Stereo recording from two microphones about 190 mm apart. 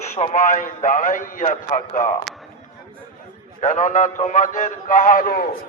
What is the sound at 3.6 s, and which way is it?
A man's voice, 40° left (ahead or behind).